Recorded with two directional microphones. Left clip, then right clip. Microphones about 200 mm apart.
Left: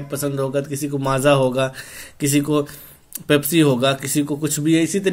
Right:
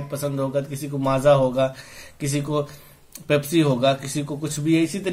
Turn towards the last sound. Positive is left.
turn(degrees=35)  # may be behind; listen again after turning